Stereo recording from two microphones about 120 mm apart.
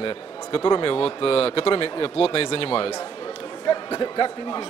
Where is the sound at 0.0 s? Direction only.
40° left (ahead or behind).